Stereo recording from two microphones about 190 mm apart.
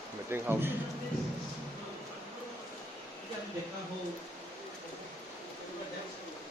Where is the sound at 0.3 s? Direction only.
10° right (ahead or behind).